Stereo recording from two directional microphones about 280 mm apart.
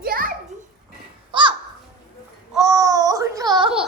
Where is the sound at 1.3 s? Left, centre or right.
Centre.